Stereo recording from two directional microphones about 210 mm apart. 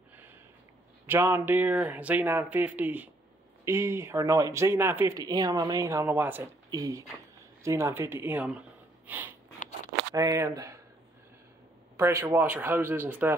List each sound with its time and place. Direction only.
1.0 s speech: 10° right (ahead or behind)
12.0 s speech: 10° right (ahead or behind)